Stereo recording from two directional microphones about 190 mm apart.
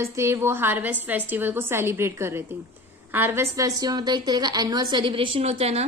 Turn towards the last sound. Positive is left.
turn(degrees=-35)  # may be behind; listen again after turning